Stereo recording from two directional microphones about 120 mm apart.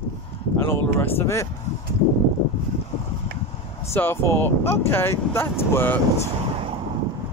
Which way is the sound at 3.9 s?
20° left (ahead or behind).